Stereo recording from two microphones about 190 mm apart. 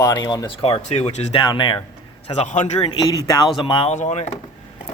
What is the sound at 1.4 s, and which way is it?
Speech, 25° left (ahead or behind).